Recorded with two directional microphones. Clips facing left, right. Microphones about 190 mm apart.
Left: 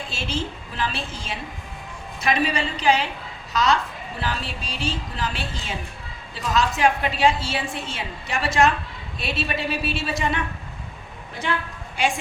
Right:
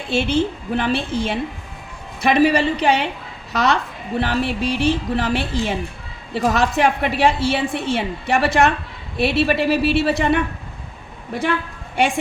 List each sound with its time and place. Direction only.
0.1 s a woman's voice: 60° right (ahead or behind)